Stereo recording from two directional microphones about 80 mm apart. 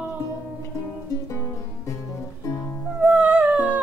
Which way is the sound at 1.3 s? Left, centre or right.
Left.